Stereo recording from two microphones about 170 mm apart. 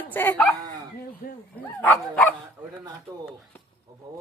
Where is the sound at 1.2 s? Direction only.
65° left (ahead or behind).